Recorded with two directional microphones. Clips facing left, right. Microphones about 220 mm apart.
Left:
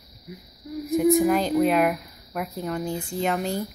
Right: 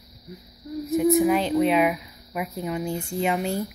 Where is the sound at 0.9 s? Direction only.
Centre (ahead or behind).